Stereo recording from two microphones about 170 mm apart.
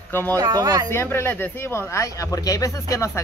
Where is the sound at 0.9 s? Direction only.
15° left (ahead or behind).